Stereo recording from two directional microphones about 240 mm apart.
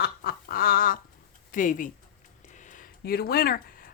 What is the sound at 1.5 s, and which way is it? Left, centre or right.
Speech, left.